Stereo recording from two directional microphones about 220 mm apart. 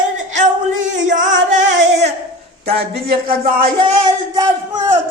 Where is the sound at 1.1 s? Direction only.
35° right (ahead or behind).